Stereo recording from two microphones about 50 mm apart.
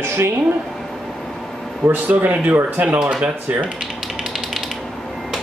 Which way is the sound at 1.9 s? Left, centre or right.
Right.